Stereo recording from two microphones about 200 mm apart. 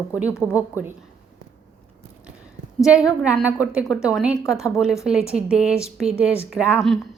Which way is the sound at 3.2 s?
5° right (ahead or behind).